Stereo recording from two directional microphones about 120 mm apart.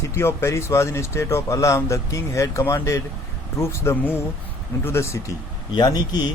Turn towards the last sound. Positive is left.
turn(degrees=35)  # may be behind; listen again after turning